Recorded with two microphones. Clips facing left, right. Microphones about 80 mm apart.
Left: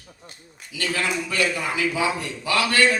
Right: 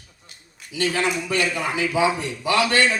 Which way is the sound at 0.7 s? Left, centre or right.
Right.